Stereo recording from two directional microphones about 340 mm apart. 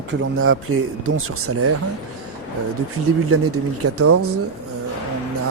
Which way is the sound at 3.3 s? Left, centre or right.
Right.